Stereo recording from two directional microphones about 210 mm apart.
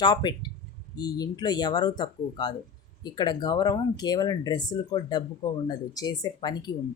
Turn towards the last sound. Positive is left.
turn(degrees=20)  # may be behind; listen again after turning